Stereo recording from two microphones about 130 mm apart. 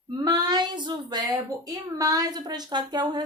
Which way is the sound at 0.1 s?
30° right (ahead or behind).